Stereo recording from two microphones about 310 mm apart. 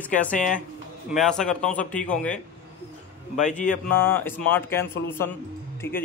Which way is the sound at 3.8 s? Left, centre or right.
Centre.